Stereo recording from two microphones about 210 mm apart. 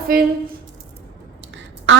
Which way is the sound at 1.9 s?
60° right (ahead or behind).